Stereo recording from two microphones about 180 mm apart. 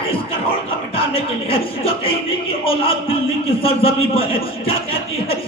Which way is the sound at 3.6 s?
30° left (ahead or behind).